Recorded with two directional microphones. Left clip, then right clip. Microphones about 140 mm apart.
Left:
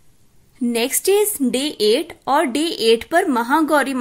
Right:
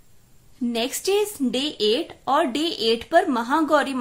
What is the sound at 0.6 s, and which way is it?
Speech, 35° left (ahead or behind).